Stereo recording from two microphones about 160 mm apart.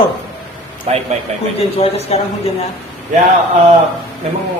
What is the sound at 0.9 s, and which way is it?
Speech, 40° right (ahead or behind).